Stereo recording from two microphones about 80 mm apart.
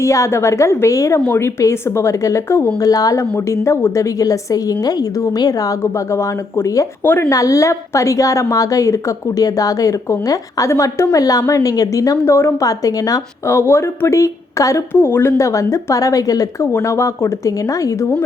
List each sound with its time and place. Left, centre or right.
0.0 s speech: left
2.9 s a woman's voice: left
3.2 s speech: left
4.2 s a woman's voice: left
5.8 s speech: left
7.0 s speech: left
7.3 s a woman's voice: left
12.2 s speech: left
12.6 s a woman's voice: left
13.6 s speech: left
14.9 s speech: left
15.4 s a woman's voice: left